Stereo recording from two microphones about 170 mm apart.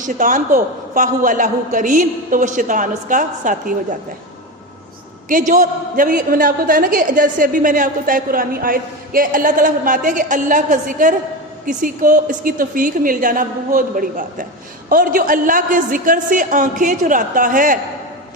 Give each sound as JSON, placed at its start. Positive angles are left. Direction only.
{"t": 0.0, "sound": "a man's voice", "side_deg": -50}
{"t": 5.3, "sound": "a man's voice", "side_deg": -50}